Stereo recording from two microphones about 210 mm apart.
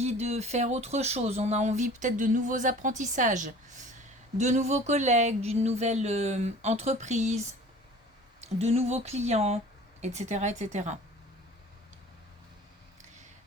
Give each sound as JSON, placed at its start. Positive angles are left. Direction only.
{"t": 0.0, "sound": "speech", "side_deg": -30}